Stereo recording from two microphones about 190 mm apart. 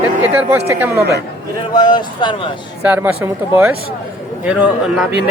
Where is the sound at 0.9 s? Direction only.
60° right (ahead or behind).